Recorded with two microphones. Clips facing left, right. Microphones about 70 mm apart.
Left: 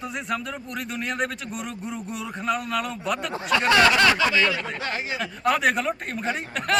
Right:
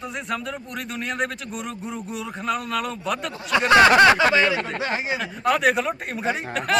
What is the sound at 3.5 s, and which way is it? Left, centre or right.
Speech, right.